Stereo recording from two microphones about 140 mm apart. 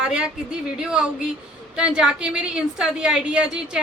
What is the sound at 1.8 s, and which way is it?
A woman's voice, 5° right (ahead or behind).